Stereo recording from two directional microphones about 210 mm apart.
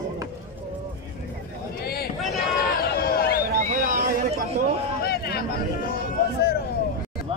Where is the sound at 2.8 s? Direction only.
45° left (ahead or behind).